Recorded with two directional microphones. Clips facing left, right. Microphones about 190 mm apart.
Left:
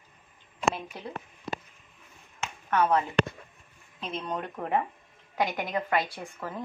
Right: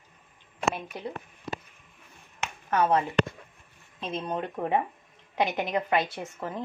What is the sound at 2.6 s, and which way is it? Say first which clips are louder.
Speech: right 1 dB; 30° right (ahead or behind).